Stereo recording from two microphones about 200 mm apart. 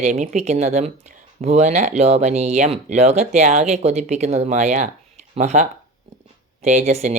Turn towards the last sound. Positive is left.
turn(degrees=-35)  # may be behind; listen again after turning